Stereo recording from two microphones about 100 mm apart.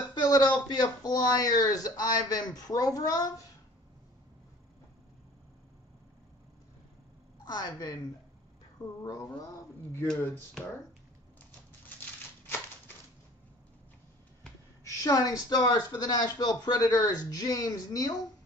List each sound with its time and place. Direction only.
0.1 s speech: 45° left (ahead or behind)
7.4 s speech: 40° left (ahead or behind)
14.8 s speech: 35° left (ahead or behind)